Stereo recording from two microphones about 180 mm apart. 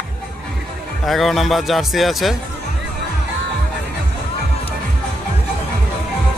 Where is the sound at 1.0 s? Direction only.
Centre (ahead or behind).